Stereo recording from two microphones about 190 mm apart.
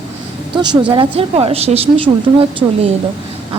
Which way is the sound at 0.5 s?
25° right (ahead or behind).